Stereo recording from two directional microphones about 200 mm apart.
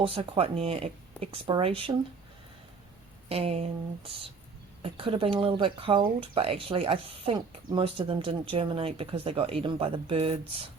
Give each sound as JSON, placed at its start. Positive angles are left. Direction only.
{"t": 0.0, "sound": "speech", "side_deg": -25}
{"t": 3.2, "sound": "speech", "side_deg": -30}